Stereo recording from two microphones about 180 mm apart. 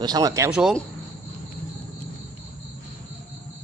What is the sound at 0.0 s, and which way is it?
Speech, 20° right (ahead or behind).